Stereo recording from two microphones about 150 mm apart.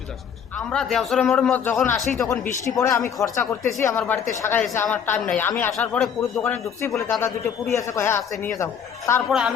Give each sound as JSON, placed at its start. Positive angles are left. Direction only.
{"t": 0.7, "sound": "a man's voice", "side_deg": 5}
{"t": 2.3, "sound": "a man's voice", "side_deg": 20}
{"t": 6.4, "sound": "a woman's voice", "side_deg": 15}